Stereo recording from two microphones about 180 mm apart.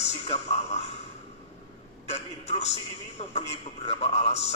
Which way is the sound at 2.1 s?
35° left (ahead or behind).